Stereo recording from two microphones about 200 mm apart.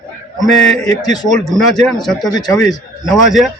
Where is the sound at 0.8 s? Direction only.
20° left (ahead or behind).